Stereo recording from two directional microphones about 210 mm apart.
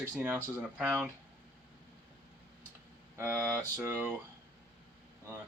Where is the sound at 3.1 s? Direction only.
10° right (ahead or behind).